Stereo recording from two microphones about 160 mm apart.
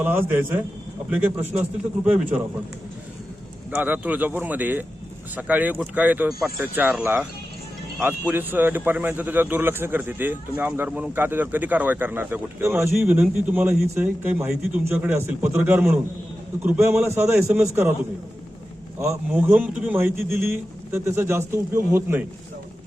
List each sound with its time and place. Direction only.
0.0 s a man's voice: 15° right (ahead or behind)
3.7 s a man's voice: 10° right (ahead or behind)
8.3 s a man's voice: 10° right (ahead or behind)
18.9 s a man's voice: 20° right (ahead or behind)